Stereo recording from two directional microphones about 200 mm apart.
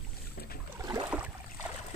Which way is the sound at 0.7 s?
15° right (ahead or behind).